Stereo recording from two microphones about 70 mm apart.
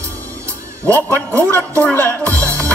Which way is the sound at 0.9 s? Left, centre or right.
Left.